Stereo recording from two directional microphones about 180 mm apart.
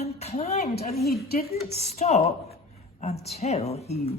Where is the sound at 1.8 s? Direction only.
35° left (ahead or behind).